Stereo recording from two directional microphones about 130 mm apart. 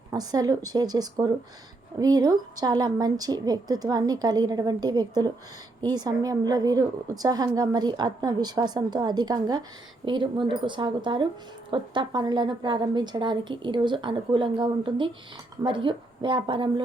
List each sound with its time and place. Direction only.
0.1 s a woman's voice: 30° right (ahead or behind)